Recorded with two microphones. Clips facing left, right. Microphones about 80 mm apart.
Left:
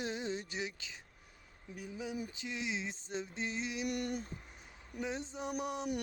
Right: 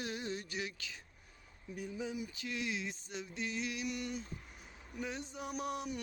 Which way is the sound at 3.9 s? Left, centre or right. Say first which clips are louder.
Left 3 dB; left.